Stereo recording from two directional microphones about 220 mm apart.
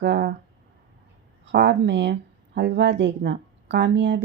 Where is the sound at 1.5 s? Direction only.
50° right (ahead or behind).